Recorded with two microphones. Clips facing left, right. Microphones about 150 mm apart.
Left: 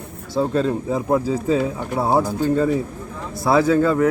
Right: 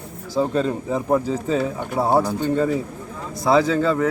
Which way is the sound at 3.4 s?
20° right (ahead or behind).